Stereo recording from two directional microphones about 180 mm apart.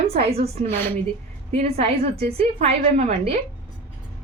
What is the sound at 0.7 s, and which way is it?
Speech, 10° left (ahead or behind).